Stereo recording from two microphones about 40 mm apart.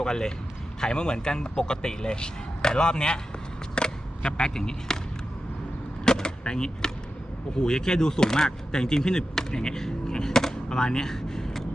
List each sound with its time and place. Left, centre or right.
0.0 s speech: centre
6.1 s a sound: centre
7.6 s speech: centre